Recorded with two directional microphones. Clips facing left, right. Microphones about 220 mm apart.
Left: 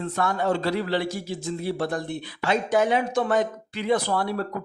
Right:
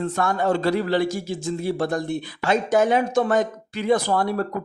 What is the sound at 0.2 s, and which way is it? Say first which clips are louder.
Speech: right 2 dB; 45° right (ahead or behind).